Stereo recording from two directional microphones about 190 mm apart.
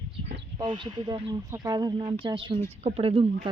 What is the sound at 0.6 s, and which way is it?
Speech, 25° right (ahead or behind).